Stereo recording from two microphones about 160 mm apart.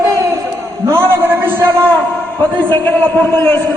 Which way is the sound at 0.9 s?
15° right (ahead or behind).